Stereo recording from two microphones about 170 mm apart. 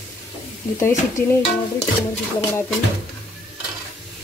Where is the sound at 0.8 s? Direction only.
15° left (ahead or behind).